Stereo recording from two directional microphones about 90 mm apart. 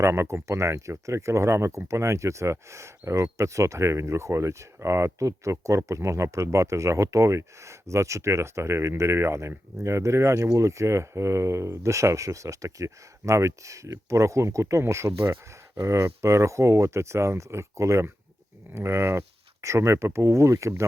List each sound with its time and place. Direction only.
0.0 s speech: 30° right (ahead or behind)